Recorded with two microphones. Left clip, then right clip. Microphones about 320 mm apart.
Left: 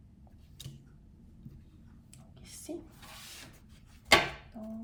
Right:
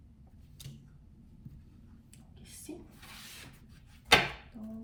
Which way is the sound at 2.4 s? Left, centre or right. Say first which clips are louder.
Left 4 dB; centre.